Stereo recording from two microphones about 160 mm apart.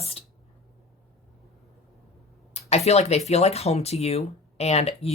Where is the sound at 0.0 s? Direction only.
35° left (ahead or behind).